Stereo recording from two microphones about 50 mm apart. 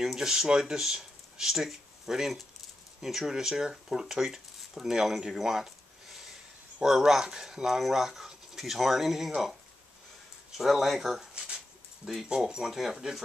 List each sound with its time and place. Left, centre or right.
0.0 s speech: centre
6.8 s speech: centre
10.6 s speech: centre
11.3 s dog: centre
12.3 s speech: centre